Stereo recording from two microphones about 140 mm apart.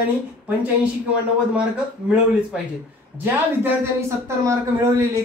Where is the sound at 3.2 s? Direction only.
15° right (ahead or behind).